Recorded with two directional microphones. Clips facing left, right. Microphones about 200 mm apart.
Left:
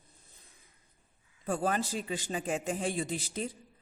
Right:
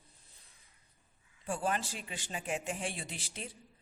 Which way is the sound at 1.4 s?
40° left (ahead or behind).